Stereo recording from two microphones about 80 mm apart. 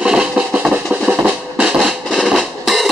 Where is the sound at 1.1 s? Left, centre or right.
Centre.